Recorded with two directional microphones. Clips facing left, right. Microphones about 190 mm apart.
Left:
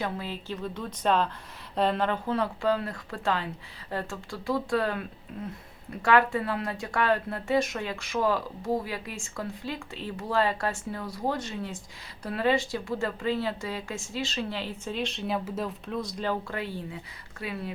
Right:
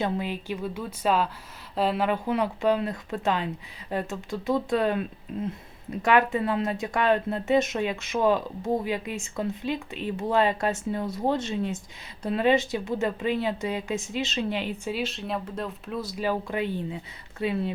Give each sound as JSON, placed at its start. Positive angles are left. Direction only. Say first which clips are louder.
{"t": 0.0, "sound": "a woman's voice", "louder": "right 5 dB", "side_deg": -15}
{"t": 14.9, "sound": "speech", "louder": "even", "side_deg": 0}